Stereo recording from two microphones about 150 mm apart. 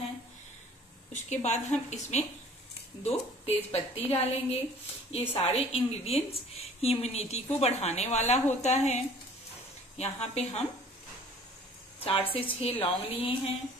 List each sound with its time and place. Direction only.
1.1 s a woman's voice: 50° left (ahead or behind)
12.0 s a woman's voice: 40° left (ahead or behind)